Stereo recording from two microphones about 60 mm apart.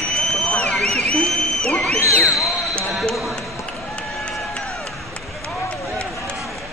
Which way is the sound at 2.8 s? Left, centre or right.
Centre.